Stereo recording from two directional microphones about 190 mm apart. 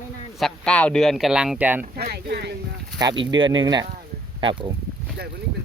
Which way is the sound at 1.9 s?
55° right (ahead or behind).